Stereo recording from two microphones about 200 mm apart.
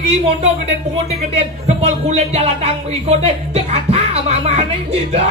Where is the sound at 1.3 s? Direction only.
35° right (ahead or behind).